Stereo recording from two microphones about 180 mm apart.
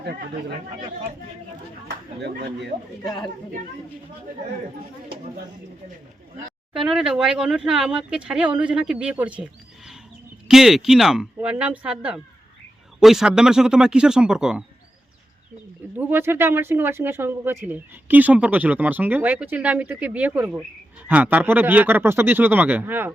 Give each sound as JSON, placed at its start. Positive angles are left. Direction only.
{"t": 2.2, "sound": "speech", "side_deg": -70}
{"t": 6.7, "sound": "speech", "side_deg": -5}
{"t": 16.0, "sound": "speech", "side_deg": -10}